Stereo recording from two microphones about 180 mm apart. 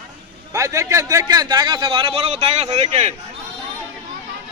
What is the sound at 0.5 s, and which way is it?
A man's voice, 20° right (ahead or behind).